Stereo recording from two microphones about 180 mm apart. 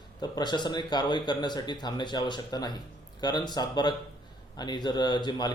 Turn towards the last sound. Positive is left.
turn(degrees=25)  # may be behind; listen again after turning